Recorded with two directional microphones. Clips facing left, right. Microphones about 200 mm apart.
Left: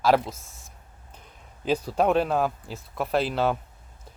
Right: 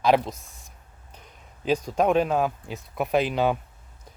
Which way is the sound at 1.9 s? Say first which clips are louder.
Even; 5° left (ahead or behind).